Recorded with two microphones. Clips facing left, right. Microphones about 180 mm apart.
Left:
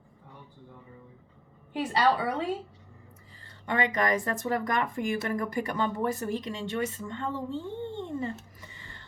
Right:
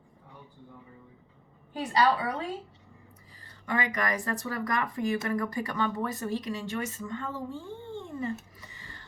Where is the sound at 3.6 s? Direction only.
25° left (ahead or behind).